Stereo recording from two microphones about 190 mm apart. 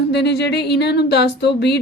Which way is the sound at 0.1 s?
60° left (ahead or behind).